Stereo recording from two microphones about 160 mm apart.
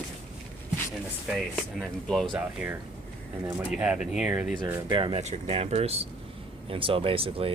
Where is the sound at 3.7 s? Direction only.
5° right (ahead or behind).